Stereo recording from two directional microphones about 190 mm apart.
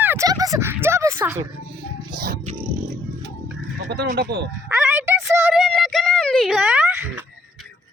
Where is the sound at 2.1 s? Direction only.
55° right (ahead or behind).